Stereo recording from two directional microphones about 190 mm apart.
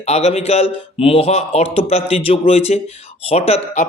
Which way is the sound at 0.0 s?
35° left (ahead or behind).